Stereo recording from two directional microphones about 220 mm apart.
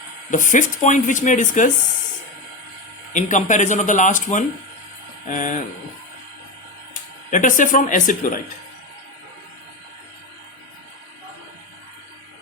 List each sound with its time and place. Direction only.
0.3 s speech: 35° left (ahead or behind)
3.1 s speech: 35° left (ahead or behind)
7.3 s speech: 35° left (ahead or behind)